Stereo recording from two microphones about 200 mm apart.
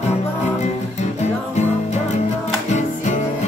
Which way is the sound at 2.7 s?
35° left (ahead or behind).